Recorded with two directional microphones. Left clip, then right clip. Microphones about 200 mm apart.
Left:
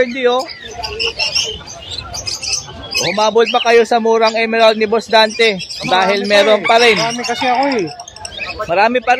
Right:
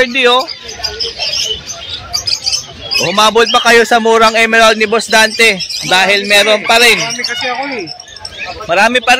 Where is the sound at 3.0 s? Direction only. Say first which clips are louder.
Right 3 dB; centre (ahead or behind).